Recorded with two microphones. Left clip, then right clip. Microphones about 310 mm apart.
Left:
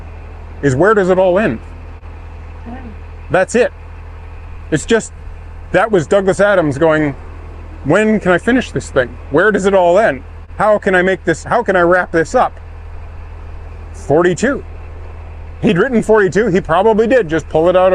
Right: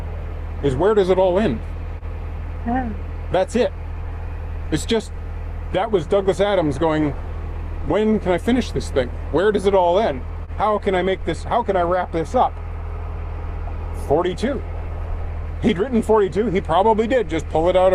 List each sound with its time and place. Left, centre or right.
0.8 s speech: left
3.3 s a man's voice: left
5.7 s a man's voice: left
14.1 s a man's voice: left
15.6 s speech: left